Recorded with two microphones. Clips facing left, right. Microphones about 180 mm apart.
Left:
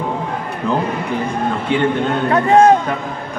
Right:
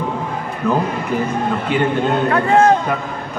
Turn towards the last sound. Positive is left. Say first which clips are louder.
# left 2 dB
turn(degrees=15)  # may be behind; listen again after turning